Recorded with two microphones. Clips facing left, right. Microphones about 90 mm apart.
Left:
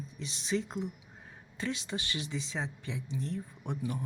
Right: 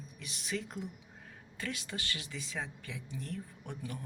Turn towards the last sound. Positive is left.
turn(degrees=20)  # may be behind; listen again after turning